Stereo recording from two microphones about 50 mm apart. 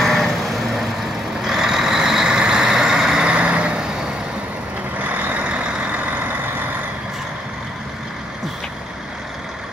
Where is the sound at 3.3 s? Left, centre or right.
Right.